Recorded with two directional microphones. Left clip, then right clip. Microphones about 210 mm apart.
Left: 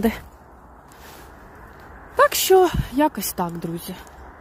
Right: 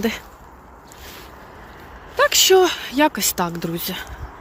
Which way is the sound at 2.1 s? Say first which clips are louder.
Right 1 dB; 35° left (ahead or behind).